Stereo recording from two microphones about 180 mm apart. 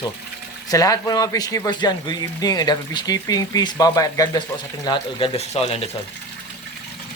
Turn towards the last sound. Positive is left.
turn(degrees=35)  # may be behind; listen again after turning